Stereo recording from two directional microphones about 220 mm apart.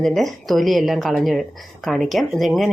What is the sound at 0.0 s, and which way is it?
Speech, centre (ahead or behind).